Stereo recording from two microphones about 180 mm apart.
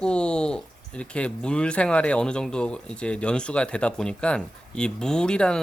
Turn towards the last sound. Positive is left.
turn(degrees=5)  # may be behind; listen again after turning